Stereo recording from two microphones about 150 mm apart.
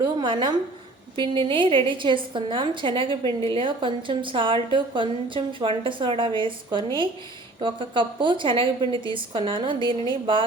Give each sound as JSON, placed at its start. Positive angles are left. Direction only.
{"t": 0.0, "sound": "a woman's voice", "side_deg": -30}